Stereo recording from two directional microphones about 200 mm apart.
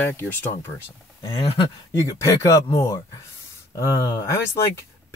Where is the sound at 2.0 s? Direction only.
15° left (ahead or behind).